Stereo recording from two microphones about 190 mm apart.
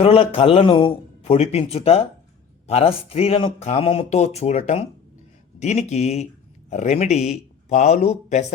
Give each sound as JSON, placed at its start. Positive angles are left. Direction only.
{"t": 0.0, "sound": "speech", "side_deg": 30}